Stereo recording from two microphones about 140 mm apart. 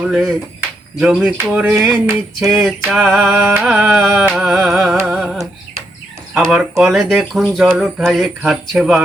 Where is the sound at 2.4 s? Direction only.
5° right (ahead or behind).